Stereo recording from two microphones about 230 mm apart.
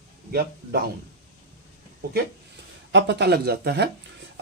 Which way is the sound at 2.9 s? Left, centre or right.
Right.